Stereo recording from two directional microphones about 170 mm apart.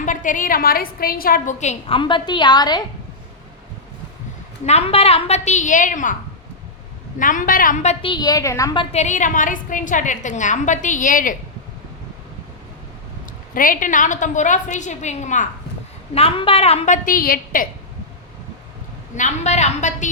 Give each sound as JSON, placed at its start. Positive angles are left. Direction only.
{"t": 0.0, "sound": "a woman's voice", "side_deg": 50}
{"t": 2.0, "sound": "a woman's voice", "side_deg": 30}
{"t": 4.6, "sound": "a woman's voice", "side_deg": 35}
{"t": 7.2, "sound": "a woman's voice", "side_deg": 50}
{"t": 8.0, "sound": "a woman's voice", "side_deg": 25}
{"t": 13.5, "sound": "a woman's voice", "side_deg": 55}
{"t": 19.1, "sound": "a woman's voice", "side_deg": 45}